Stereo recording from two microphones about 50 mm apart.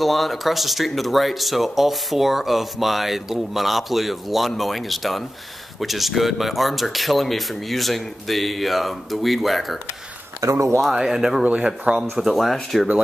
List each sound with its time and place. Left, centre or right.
0.0 s speech: centre
10.4 s speech: right
10.9 s speech: centre
11.4 s speech: right
12.0 s speech: centre